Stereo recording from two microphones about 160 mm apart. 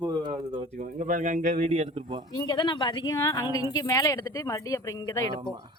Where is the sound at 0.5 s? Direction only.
55° right (ahead or behind); by 2.2 s 35° right (ahead or behind).